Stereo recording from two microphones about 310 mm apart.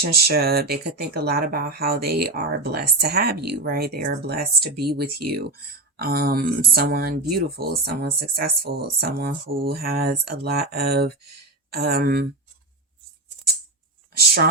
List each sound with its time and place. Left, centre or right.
0.0 s speech: right
14.2 s speech: right